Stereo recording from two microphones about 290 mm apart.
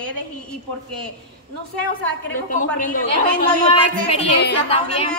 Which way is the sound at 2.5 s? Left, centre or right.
Left.